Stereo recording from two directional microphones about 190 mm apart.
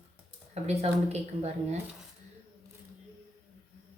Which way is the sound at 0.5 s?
35° right (ahead or behind).